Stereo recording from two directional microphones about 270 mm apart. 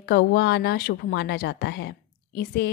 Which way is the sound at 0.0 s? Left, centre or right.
Left.